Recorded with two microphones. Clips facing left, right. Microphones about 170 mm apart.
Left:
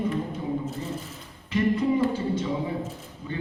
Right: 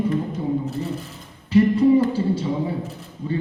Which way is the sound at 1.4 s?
35° right (ahead or behind).